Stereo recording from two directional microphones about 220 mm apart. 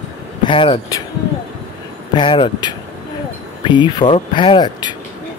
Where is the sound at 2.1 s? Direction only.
20° left (ahead or behind).